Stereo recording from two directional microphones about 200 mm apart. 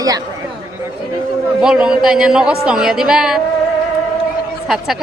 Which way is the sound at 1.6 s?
5° right (ahead or behind).